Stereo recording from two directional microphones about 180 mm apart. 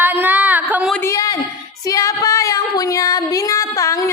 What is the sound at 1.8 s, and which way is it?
Female singing, 20° left (ahead or behind).